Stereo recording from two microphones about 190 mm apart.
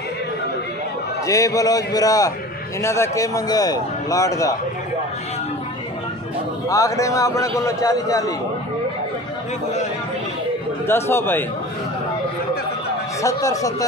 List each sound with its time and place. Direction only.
1.2 s a man's voice: 15° left (ahead or behind)
6.7 s a man's voice: 15° left (ahead or behind)
10.9 s a man's voice: 10° left (ahead or behind)
13.2 s a man's voice: 15° left (ahead or behind)